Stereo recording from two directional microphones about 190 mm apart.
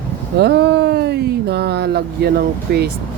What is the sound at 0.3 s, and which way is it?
Speech, 60° right (ahead or behind).